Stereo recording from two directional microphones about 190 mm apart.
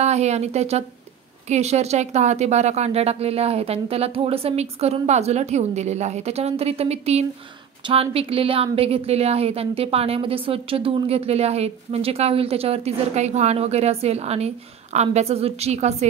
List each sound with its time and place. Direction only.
0.0 s a woman's voice: 35° right (ahead or behind)